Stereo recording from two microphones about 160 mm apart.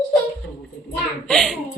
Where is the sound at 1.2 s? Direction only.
5° left (ahead or behind).